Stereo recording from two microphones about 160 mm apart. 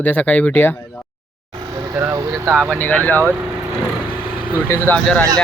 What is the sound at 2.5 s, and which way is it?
Speech, 5° right (ahead or behind).